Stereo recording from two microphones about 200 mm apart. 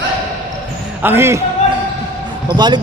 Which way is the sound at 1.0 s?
10° right (ahead or behind).